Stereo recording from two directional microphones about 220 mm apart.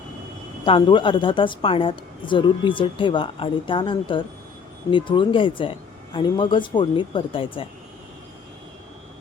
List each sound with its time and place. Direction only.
0.6 s a woman's voice: 20° left (ahead or behind)